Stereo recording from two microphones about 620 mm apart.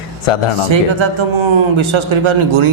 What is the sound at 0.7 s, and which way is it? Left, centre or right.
A man's voice, right.